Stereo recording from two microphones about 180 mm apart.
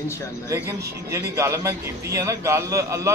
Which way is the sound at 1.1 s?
15° right (ahead or behind).